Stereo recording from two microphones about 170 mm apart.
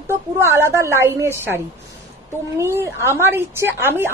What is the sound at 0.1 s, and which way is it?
A woman's voice, 15° right (ahead or behind).